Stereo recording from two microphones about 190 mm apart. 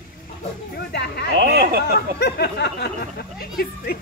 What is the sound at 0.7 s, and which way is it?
Speech, 60° left (ahead or behind).